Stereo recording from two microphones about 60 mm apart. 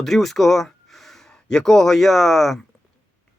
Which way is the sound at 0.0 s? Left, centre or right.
Centre.